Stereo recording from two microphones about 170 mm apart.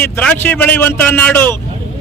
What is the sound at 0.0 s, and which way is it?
Speech, 10° left (ahead or behind).